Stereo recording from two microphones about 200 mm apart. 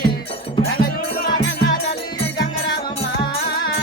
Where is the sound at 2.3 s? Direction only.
60° left (ahead or behind).